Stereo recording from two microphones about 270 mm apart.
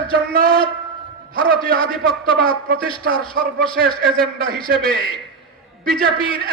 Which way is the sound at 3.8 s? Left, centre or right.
Right.